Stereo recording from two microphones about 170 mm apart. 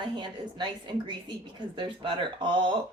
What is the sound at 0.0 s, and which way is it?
Speech, 30° right (ahead or behind).